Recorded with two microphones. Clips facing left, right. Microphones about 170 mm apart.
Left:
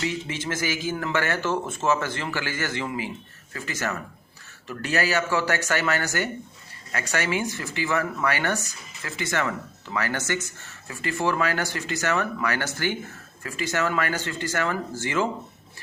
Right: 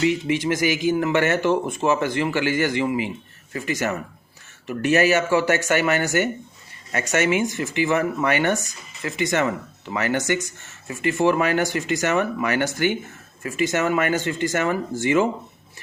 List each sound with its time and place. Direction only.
0.0 s a man's voice: 15° right (ahead or behind)